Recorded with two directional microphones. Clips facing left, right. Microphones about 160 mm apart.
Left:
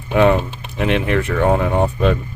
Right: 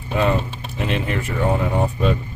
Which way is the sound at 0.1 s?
65° left (ahead or behind).